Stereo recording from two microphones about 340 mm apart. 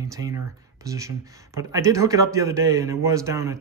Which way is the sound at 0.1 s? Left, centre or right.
Centre.